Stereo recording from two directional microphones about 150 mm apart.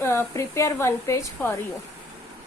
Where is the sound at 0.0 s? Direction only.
15° left (ahead or behind).